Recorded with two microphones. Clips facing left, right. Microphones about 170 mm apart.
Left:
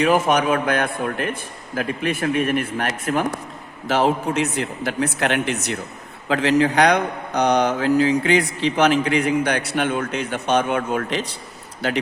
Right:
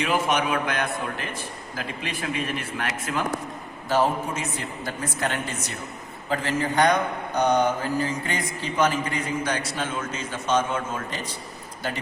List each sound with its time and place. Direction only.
0.0 s a man's voice: 45° left (ahead or behind)
3.8 s a man's voice: 85° left
6.2 s a man's voice: 85° left